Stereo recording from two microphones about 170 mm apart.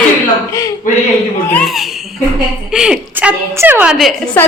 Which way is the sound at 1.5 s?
5° left (ahead or behind).